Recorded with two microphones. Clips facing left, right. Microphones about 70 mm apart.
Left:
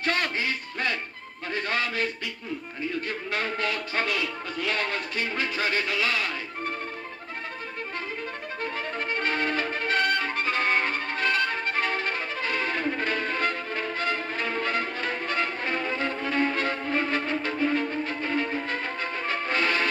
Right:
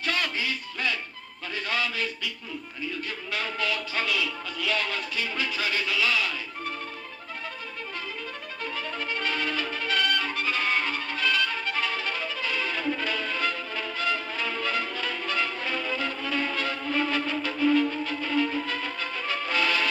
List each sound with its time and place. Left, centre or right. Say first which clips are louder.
0.0 s music: left 2 dB; left
1.5 s a sound: left 1 dB; left
2.8 s speech: left 3 dB; left
8.6 s violin: left 1 dB; left